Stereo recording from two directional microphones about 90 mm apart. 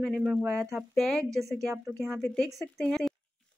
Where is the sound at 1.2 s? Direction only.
35° right (ahead or behind).